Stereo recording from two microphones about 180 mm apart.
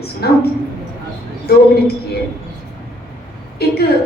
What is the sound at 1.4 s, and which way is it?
Speech, 60° left (ahead or behind).